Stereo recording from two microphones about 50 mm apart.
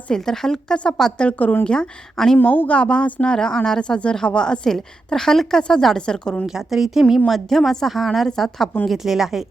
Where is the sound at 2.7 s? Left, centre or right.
Left.